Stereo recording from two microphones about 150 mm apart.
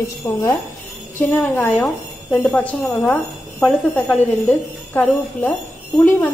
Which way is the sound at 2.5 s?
5° left (ahead or behind).